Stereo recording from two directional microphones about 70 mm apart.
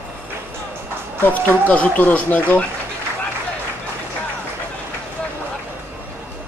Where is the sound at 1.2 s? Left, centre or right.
Left.